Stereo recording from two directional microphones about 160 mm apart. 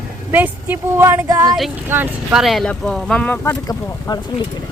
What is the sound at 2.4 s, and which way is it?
Speech, centre (ahead or behind).